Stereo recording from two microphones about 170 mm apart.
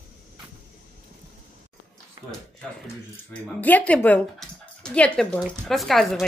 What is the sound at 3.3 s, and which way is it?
Speech, 10° left (ahead or behind).